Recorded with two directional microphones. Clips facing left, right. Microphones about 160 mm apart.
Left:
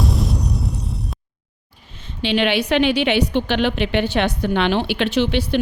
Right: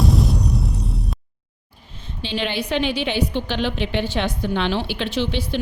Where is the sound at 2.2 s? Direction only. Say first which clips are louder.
Left 6 dB; 75° left (ahead or behind).